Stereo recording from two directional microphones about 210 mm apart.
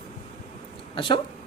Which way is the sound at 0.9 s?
25° left (ahead or behind).